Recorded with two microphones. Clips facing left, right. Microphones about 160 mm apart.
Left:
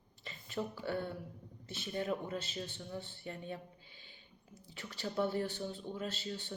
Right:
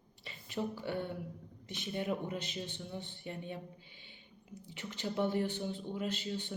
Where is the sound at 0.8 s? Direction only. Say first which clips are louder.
Even; 15° right (ahead or behind).